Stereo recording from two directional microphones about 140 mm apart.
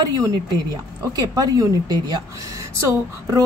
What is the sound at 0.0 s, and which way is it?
A woman's voice, 25° right (ahead or behind).